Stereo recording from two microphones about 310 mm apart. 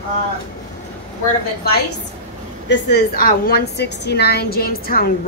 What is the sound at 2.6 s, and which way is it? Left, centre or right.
A woman's voice, left.